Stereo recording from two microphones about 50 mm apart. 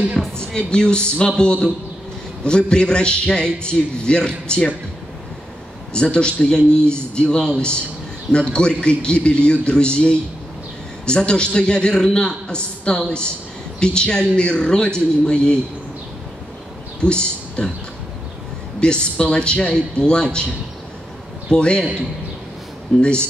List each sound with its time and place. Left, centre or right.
0.2 s a man's voice: centre
0.6 s a man's voice: centre
5.9 s a man's voice: centre
17.0 s speech: centre
18.8 s a man's voice: centre
21.5 s a man's voice: centre
22.9 s a man's voice: centre